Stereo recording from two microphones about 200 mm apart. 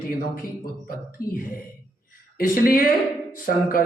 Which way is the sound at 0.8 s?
45° left (ahead or behind).